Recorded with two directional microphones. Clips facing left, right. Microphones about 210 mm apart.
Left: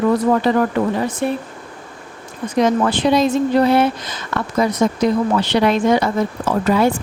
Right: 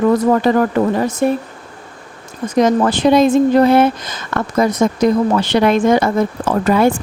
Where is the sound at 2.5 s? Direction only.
45° right (ahead or behind).